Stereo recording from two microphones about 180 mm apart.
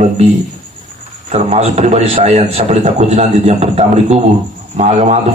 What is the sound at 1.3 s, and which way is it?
A man's voice, 35° right (ahead or behind).